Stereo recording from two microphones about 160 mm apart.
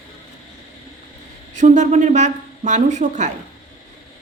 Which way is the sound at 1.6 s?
50° right (ahead or behind).